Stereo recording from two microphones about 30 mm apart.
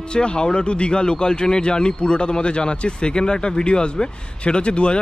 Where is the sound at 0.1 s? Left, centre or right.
Left.